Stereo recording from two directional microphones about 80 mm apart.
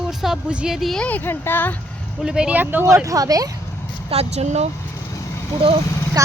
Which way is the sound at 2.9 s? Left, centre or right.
Right.